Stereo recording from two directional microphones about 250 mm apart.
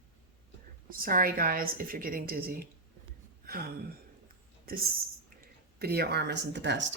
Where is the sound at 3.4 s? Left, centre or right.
Right.